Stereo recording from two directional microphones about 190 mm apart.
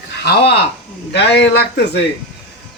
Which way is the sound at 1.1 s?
60° left (ahead or behind).